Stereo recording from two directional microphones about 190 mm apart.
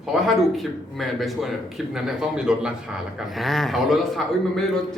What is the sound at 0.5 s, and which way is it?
Speech, centre (ahead or behind).